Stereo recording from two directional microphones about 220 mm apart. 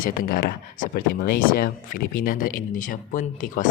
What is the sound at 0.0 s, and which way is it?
Speech, 40° left (ahead or behind).